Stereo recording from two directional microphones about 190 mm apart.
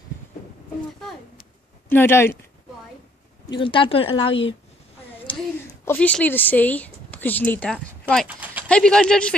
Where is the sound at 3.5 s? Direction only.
25° left (ahead or behind).